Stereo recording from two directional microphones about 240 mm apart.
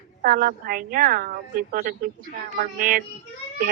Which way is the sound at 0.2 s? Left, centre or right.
Right.